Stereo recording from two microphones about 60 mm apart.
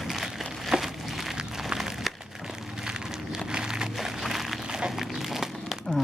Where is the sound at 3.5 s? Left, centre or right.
Centre.